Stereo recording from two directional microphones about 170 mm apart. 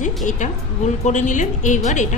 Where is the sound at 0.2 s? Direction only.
45° left (ahead or behind).